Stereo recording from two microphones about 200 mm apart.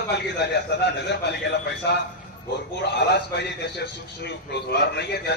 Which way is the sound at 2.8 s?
55° left (ahead or behind).